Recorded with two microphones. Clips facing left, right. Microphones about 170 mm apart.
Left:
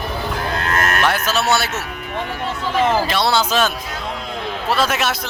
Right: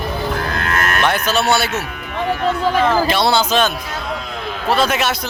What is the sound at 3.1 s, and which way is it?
Speech, centre (ahead or behind).